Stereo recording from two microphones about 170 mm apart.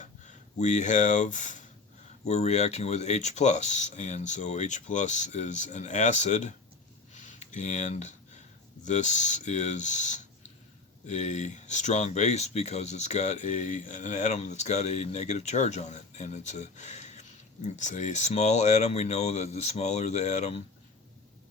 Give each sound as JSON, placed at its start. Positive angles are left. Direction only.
{"t": 0.6, "sound": "speech", "side_deg": 45}
{"t": 7.1, "sound": "a sound", "side_deg": 45}
{"t": 8.8, "sound": "speech", "side_deg": 45}